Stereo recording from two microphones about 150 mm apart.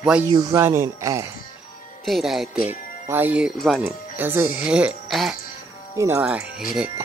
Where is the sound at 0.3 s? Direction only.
25° right (ahead or behind).